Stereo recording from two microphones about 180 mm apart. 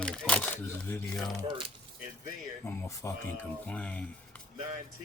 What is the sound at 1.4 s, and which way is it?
Speech, 25° right (ahead or behind).